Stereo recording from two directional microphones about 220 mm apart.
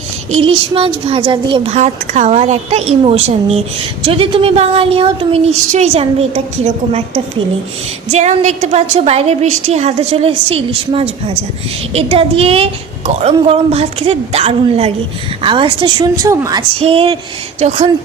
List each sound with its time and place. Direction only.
0.4 s speech: 25° right (ahead or behind)
8.1 s a woman's voice: 30° right (ahead or behind)